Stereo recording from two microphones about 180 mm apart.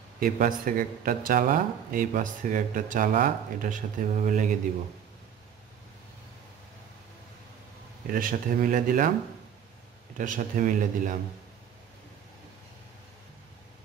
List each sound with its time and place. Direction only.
0.2 s speech: 50° right (ahead or behind)
8.1 s speech: 50° right (ahead or behind)
10.1 s speech: 45° right (ahead or behind)